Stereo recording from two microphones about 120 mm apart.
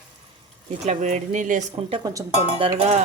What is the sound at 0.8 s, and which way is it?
Speech, 85° right.